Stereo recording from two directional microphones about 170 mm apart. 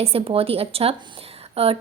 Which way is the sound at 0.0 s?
35° right (ahead or behind).